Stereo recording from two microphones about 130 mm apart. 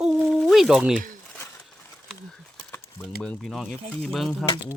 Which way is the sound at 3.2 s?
5° left (ahead or behind).